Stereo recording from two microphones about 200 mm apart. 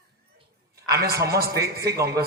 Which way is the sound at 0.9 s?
50° right (ahead or behind).